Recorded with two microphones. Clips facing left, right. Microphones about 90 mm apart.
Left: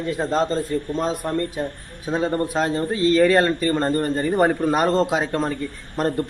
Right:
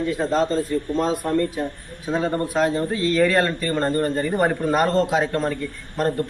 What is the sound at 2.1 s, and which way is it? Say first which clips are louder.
A man's voice: left 1 dB; 25° left (ahead or behind).